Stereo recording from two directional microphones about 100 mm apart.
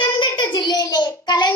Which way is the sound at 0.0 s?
55° left (ahead or behind).